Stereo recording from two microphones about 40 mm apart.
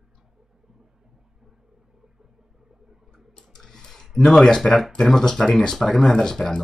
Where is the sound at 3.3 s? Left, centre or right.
Centre.